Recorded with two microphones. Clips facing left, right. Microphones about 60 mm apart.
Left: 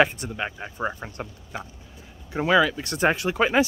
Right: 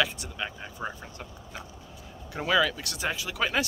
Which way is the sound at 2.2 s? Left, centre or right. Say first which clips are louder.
Left 5 dB; left.